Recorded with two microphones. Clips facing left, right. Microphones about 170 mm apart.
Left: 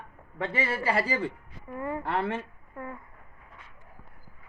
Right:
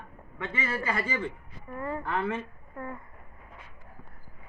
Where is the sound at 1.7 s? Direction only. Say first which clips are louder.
Left 1 dB; 15° left (ahead or behind).